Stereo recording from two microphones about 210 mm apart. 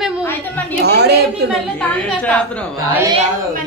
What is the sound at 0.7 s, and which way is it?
Speech, 50° right (ahead or behind).